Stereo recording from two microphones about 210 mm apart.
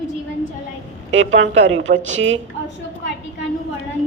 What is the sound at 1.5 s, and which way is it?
Speech, 35° right (ahead or behind).